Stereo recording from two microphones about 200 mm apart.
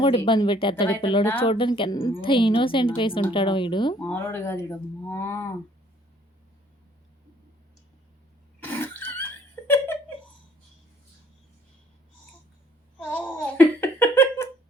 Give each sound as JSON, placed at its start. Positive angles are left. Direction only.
{"t": 0.0, "sound": "a woman's voice", "side_deg": 25}
{"t": 4.0, "sound": "speech", "side_deg": 10}
{"t": 8.6, "sound": "cough", "side_deg": 10}
{"t": 9.6, "sound": "giggle", "side_deg": 10}
{"t": 13.0, "sound": "giggle", "side_deg": 10}